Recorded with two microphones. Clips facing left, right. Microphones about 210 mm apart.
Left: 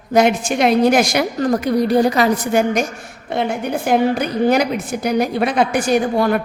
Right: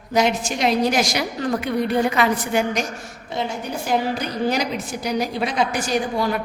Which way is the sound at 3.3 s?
60° left (ahead or behind).